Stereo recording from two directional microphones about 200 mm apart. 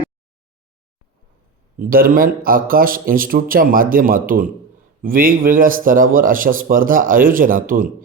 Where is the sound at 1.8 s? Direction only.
45° right (ahead or behind).